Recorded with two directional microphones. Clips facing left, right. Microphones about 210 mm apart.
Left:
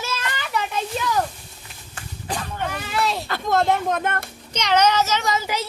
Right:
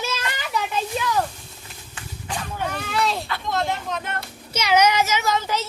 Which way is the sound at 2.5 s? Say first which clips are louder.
Right 1 dB; centre (ahead or behind).